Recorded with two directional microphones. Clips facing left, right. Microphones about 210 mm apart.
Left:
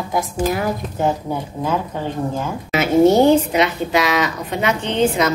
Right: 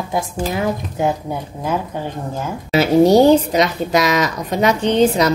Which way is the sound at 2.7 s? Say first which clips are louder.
Right 1 dB; 35° right (ahead or behind).